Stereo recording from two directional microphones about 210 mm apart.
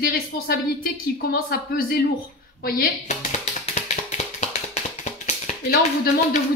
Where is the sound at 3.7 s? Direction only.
35° left (ahead or behind).